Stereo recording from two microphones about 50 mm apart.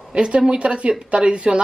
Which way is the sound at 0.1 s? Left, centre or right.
Right.